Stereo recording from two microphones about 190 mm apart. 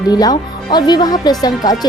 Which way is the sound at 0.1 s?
20° left (ahead or behind).